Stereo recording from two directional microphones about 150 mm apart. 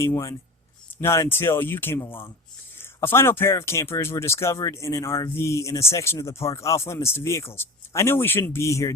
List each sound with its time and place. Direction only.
0.0 s speech: 20° left (ahead or behind)